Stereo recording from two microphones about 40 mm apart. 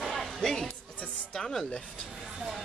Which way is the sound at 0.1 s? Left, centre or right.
Centre.